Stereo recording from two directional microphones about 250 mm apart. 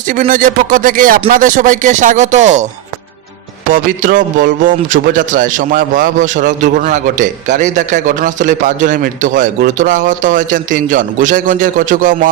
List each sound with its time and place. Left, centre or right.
0.1 s a man's voice: right
3.7 s a man's voice: right